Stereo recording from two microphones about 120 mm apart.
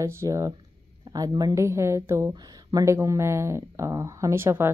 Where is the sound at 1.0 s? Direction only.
35° right (ahead or behind).